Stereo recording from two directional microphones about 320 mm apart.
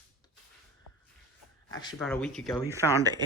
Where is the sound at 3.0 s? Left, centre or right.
Centre.